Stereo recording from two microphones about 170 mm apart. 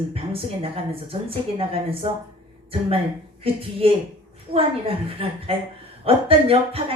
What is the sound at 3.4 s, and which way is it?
A woman's voice, 35° right (ahead or behind).